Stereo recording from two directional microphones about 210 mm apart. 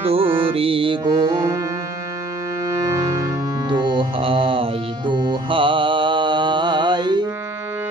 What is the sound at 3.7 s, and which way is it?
Mantra, 20° right (ahead or behind).